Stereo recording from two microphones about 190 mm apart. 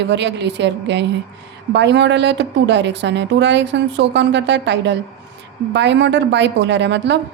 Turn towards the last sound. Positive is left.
turn(degrees=-65)  # may be behind; listen again after turning